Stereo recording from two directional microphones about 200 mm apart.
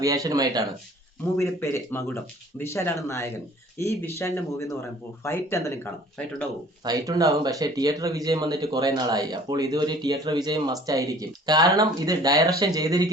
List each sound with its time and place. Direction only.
0.0 s speech: 15° right (ahead or behind)
1.4 s speech: 15° left (ahead or behind)
6.8 s speech: 15° right (ahead or behind)